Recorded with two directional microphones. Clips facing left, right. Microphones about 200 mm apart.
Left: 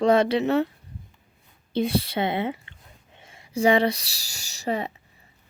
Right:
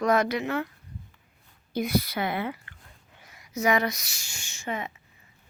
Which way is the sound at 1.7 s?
30° left (ahead or behind).